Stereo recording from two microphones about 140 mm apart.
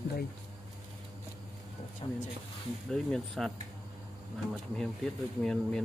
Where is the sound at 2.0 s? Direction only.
40° left (ahead or behind).